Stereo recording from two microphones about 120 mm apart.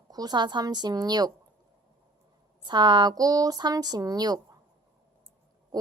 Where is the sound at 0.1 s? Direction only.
35° right (ahead or behind).